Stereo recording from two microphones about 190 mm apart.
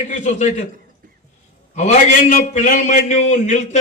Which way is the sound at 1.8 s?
40° left (ahead or behind).